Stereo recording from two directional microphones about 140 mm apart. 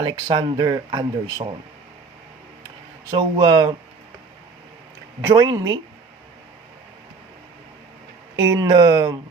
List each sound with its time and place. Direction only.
0.0 s speech: 35° right (ahead or behind)
3.1 s speech: 35° right (ahead or behind)
5.2 s speech: 25° right (ahead or behind)
8.4 s speech: 25° right (ahead or behind)